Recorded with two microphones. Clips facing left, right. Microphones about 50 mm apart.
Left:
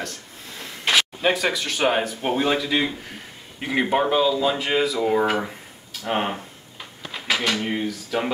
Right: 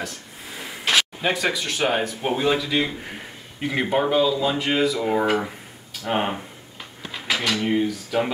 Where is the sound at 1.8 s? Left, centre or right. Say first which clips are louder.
Left 1 dB; centre.